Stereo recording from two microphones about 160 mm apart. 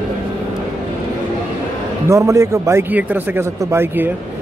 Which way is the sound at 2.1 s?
20° right (ahead or behind).